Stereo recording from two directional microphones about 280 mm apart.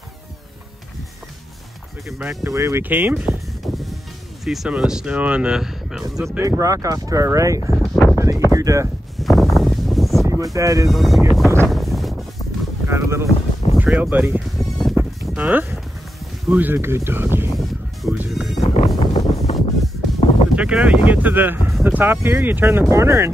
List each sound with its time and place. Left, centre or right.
2.0 s speech: centre
9.2 s a sound: centre
10.2 s speech: centre
10.9 s speech: centre
11.3 s a sound: centre
12.8 s speech: centre
13.3 s boat: left
13.7 s music: centre
18.6 s wind noise: left
20.5 s speech: centre